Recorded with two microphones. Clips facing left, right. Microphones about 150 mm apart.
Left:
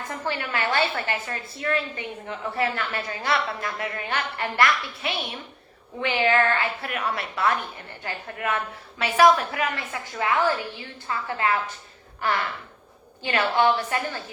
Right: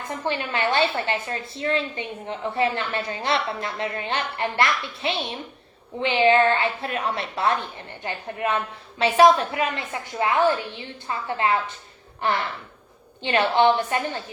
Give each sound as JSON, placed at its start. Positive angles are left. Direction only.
{"t": 0.1, "sound": "a woman's voice", "side_deg": -20}